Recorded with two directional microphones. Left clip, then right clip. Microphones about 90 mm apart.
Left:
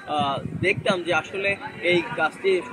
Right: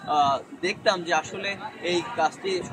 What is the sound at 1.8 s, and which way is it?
Speech, 25° right (ahead or behind).